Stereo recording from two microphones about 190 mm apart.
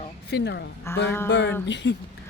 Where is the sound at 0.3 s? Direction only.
60° left (ahead or behind).